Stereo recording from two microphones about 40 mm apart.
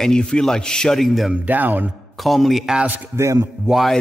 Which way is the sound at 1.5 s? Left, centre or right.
Right.